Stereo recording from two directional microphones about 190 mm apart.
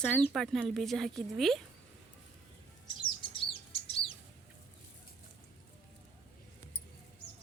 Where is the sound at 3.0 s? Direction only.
25° left (ahead or behind).